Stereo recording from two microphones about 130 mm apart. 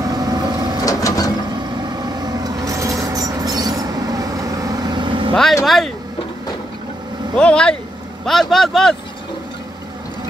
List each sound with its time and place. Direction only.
0.0 s vehicle: 30° right (ahead or behind)
0.8 s a sound: 25° left (ahead or behind)
1.8 s vehicle: 30° right (ahead or behind)
5.3 s speech: centre (ahead or behind)
7.3 s speech: 5° left (ahead or behind)